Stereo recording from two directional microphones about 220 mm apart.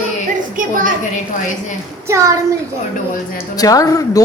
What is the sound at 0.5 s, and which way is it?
Speech, 40° right (ahead or behind).